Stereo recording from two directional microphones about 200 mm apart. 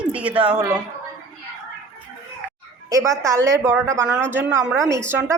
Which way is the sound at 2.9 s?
15° right (ahead or behind).